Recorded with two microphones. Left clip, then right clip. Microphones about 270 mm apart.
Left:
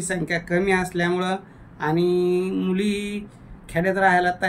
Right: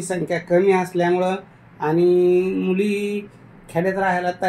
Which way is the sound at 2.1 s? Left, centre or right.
Centre.